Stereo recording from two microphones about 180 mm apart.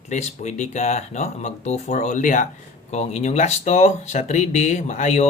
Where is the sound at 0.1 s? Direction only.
40° left (ahead or behind).